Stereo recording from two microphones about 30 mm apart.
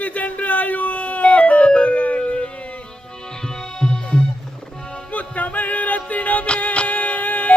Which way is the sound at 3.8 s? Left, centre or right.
Left.